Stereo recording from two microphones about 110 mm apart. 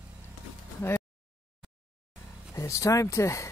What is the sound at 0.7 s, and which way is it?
Speech, 20° left (ahead or behind).